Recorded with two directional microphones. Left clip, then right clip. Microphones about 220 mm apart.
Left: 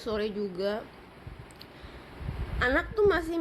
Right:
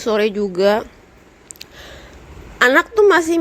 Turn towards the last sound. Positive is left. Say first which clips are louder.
# right 13 dB
turn(degrees=-40)  # may be behind; listen again after turning